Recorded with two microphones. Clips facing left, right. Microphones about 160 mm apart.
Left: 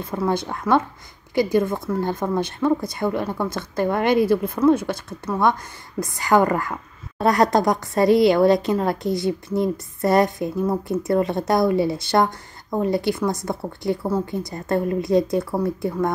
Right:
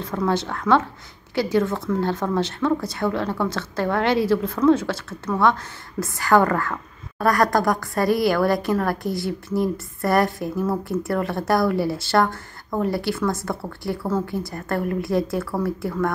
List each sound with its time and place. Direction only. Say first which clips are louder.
0.0 s a woman's voice: even; 10° left (ahead or behind)